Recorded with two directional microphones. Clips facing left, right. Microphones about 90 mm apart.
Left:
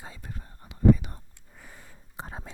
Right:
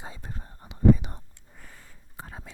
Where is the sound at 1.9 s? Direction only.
20° left (ahead or behind).